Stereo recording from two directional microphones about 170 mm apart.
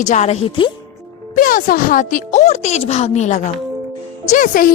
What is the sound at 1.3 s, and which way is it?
Speech, 55° left (ahead or behind).